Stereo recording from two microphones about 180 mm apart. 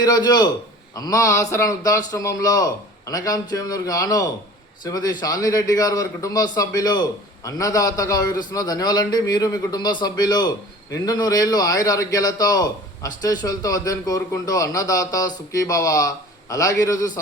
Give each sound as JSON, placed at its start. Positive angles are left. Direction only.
{"t": 0.0, "sound": "a man's voice", "side_deg": 20}